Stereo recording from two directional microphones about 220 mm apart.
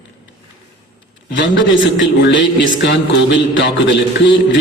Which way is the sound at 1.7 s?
60° left (ahead or behind).